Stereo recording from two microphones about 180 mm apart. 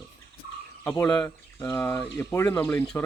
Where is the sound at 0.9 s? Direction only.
20° left (ahead or behind).